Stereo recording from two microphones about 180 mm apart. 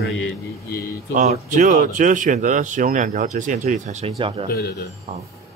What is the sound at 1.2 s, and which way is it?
Speech, 45° right (ahead or behind).